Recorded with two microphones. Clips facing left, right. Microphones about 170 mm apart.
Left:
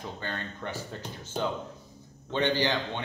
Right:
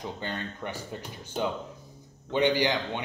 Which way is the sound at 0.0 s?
15° right (ahead or behind).